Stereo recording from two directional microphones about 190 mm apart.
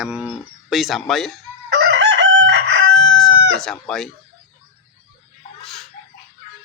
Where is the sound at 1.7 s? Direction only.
65° right (ahead or behind).